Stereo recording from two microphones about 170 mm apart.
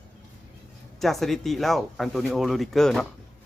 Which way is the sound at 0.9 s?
Centre (ahead or behind).